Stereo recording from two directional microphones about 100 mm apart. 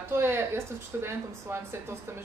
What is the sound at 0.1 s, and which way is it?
Speech, 25° right (ahead or behind).